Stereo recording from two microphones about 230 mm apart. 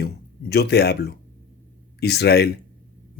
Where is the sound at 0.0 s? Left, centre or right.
Left.